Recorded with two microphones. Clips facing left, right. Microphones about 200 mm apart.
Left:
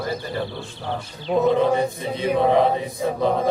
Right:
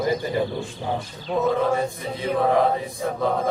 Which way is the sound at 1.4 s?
20° left (ahead or behind).